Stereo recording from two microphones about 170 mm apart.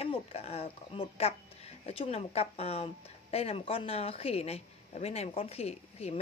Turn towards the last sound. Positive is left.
turn(degrees=40)  # may be behind; listen again after turning